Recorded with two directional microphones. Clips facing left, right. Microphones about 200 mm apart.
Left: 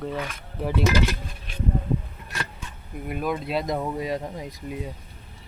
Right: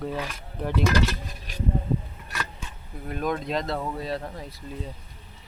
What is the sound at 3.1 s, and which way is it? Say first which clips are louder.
Speech: even; 5° left (ahead or behind).